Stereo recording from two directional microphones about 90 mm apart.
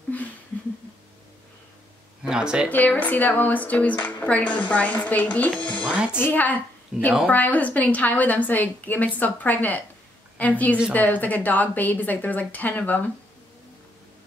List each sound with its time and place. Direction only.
0.1 s a sound: 20° left (ahead or behind)
2.2 s speech: 10° right (ahead or behind)
2.7 s a woman's voice: 20° left (ahead or behind)